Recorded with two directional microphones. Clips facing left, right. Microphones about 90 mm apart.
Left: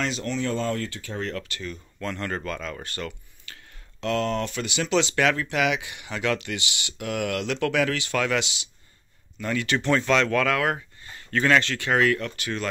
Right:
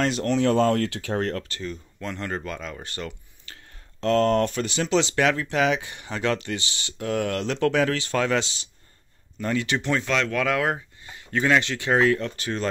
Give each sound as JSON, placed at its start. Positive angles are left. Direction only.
{"t": 0.0, "sound": "speech", "side_deg": -55}
{"t": 1.2, "sound": "speech", "side_deg": -35}
{"t": 2.0, "sound": "speech", "side_deg": -20}
{"t": 4.0, "sound": "speech", "side_deg": -40}
{"t": 9.8, "sound": "speech", "side_deg": -5}
{"t": 10.4, "sound": "speech", "side_deg": -20}